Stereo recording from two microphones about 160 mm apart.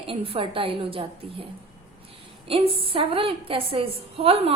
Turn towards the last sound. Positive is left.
turn(degrees=-35)  # may be behind; listen again after turning